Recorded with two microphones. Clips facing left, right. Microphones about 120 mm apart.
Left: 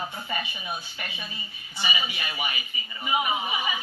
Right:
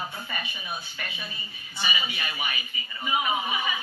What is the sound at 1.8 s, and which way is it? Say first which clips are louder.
Speech: left 1 dB; 20° left (ahead or behind).